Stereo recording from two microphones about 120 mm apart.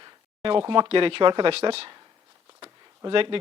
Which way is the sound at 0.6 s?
40° right (ahead or behind).